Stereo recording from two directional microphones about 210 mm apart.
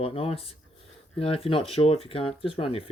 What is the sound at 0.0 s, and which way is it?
Speech, 25° left (ahead or behind).